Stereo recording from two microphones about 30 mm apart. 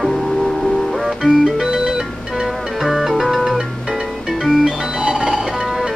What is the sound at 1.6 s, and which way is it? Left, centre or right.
Music, centre.